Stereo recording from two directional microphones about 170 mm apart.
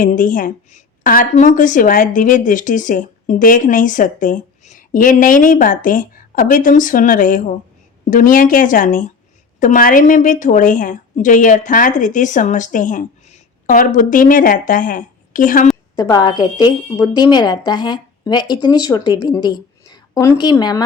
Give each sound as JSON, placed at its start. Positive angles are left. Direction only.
{"t": 0.0, "sound": "a woman's voice", "side_deg": 50}
{"t": 16.0, "sound": "a woman's voice", "side_deg": 20}